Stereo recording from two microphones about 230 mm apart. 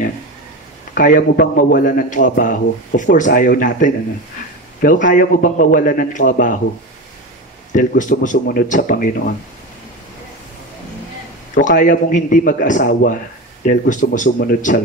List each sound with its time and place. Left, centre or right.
0.9 s a man's voice: left
7.7 s a man's voice: left
11.5 s a man's voice: left